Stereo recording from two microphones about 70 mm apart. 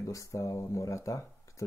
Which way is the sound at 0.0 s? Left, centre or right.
Left.